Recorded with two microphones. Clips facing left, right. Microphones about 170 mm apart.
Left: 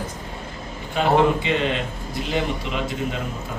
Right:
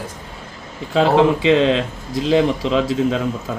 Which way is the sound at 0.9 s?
90° right.